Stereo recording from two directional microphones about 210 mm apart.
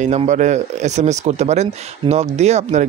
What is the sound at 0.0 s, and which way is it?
Speech, 35° right (ahead or behind).